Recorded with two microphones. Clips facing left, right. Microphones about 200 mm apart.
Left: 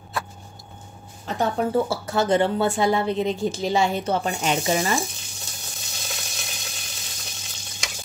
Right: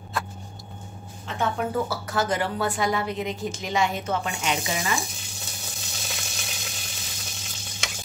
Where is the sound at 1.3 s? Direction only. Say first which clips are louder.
Left 4 dB; 35° left (ahead or behind).